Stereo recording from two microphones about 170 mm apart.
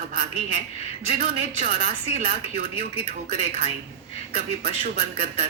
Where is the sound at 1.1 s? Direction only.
35° right (ahead or behind).